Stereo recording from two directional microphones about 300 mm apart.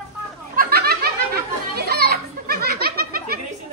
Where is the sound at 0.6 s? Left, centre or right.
Right.